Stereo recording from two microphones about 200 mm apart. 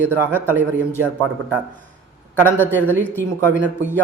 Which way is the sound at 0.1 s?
10° left (ahead or behind).